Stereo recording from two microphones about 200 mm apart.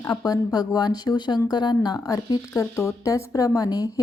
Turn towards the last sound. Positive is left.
turn(degrees=20)  # may be behind; listen again after turning